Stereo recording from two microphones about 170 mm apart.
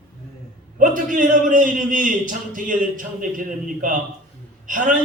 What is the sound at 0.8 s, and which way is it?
A man's voice, 50° right (ahead or behind).